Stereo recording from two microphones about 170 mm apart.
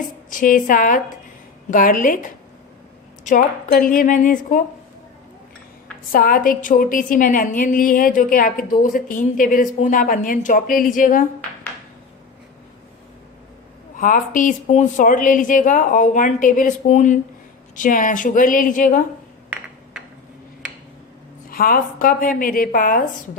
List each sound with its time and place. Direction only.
0.3 s a woman's voice: 50° left (ahead or behind)
6.1 s a woman's voice: 55° left (ahead or behind)
14.0 s a woman's voice: 50° left (ahead or behind)
21.5 s speech: 60° left (ahead or behind)